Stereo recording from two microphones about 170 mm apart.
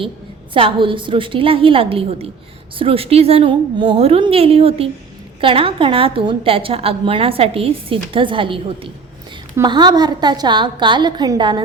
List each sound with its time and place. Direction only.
0.5 s a woman's voice: 30° right (ahead or behind)